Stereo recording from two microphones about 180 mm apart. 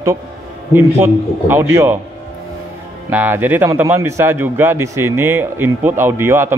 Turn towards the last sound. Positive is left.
turn(degrees=-15)  # may be behind; listen again after turning